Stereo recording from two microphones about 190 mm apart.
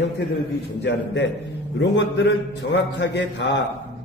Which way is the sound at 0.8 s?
65° left (ahead or behind).